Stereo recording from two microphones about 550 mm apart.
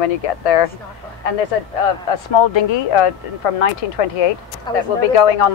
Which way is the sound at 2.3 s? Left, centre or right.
Left.